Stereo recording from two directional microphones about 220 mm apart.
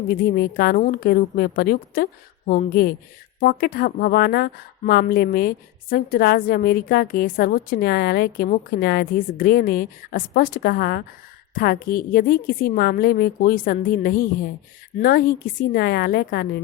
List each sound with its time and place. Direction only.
0.2 s a woman's voice: 45° left (ahead or behind)